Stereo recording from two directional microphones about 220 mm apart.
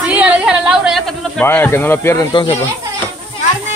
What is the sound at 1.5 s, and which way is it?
Speech, 10° left (ahead or behind).